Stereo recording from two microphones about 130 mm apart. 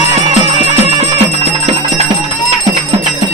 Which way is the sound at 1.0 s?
55° right (ahead or behind).